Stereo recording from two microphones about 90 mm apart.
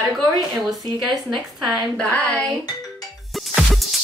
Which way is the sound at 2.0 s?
10° left (ahead or behind).